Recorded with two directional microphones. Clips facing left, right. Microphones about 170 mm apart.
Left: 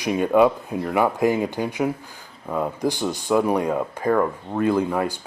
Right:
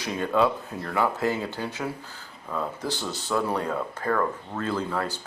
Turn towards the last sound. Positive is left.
turn(degrees=15)  # may be behind; listen again after turning